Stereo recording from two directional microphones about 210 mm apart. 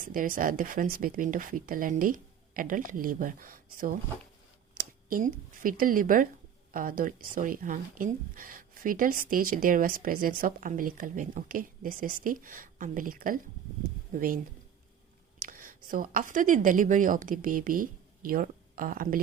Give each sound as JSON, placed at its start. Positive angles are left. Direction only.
{"t": 0.0, "sound": "a woman's voice", "side_deg": -40}
{"t": 15.4, "sound": "speech", "side_deg": -40}